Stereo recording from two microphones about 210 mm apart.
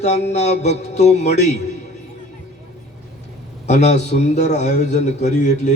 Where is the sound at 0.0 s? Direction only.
30° left (ahead or behind).